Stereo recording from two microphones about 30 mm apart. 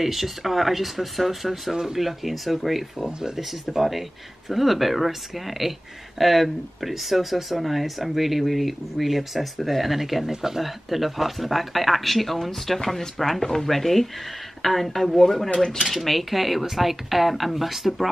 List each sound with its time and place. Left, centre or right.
0.0 s speech: centre
2.0 s speech: centre
10.6 s speech: centre
15.5 s speech: left
15.9 s speech: centre